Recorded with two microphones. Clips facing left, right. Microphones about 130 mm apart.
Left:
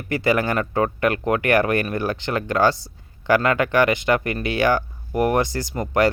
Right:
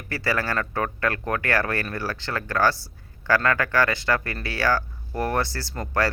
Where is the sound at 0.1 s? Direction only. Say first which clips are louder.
Left 6 dB; 20° left (ahead or behind).